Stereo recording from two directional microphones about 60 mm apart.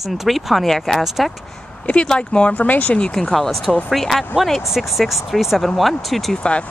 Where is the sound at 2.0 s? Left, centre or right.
Centre.